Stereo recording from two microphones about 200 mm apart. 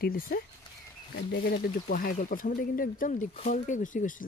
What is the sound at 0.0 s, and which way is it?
Speech, 45° left (ahead or behind).